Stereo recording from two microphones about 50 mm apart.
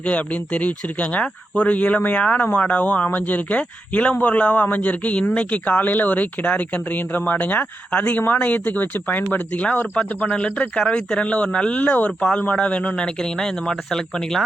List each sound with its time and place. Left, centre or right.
0.0 s speech: left
13.4 s speech: centre